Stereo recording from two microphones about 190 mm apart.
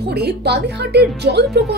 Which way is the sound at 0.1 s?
60° right (ahead or behind).